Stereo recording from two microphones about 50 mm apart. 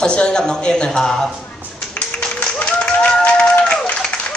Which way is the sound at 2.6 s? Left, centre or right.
Left.